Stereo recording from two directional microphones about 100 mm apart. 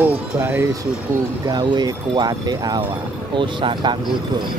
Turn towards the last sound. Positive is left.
turn(degrees=-55)  # may be behind; listen again after turning